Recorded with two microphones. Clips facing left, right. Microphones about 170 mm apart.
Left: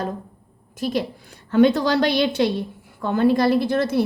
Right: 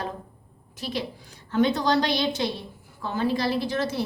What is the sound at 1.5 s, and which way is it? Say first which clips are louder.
A woman's voice: left 5 dB; 65° left (ahead or behind).